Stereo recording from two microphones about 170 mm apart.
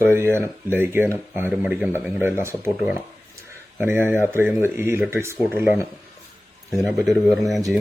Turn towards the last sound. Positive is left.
turn(degrees=0)  # may be behind; listen again after turning